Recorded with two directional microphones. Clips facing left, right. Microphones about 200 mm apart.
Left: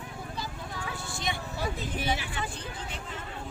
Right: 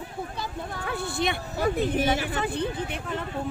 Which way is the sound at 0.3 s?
60° right (ahead or behind).